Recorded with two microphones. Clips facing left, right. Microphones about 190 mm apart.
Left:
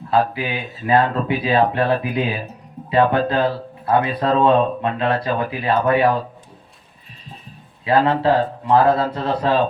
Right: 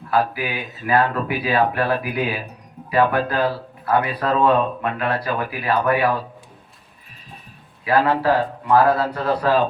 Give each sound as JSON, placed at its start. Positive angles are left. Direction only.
{"t": 0.1, "sound": "speech", "side_deg": 25}
{"t": 7.9, "sound": "speech", "side_deg": 25}